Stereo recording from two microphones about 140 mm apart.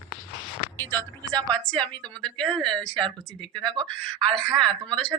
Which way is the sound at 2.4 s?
35° right (ahead or behind).